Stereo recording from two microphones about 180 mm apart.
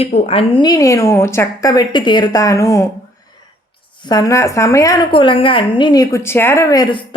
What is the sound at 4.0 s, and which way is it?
A woman's voice, 20° left (ahead or behind).